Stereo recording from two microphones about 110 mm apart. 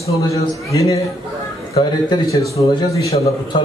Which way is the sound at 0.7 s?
30° left (ahead or behind).